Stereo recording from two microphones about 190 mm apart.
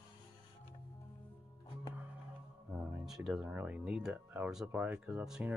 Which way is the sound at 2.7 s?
10° right (ahead or behind).